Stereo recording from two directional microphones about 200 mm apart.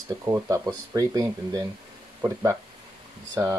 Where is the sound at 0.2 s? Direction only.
15° right (ahead or behind).